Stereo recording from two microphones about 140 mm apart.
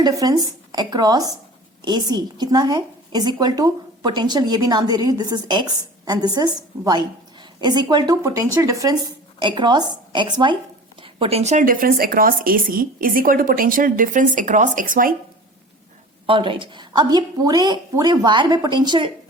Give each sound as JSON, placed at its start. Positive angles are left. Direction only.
{"t": 0.0, "sound": "a woman's voice", "side_deg": -25}
{"t": 11.6, "sound": "speech", "side_deg": -85}
{"t": 16.2, "sound": "a woman's voice", "side_deg": -35}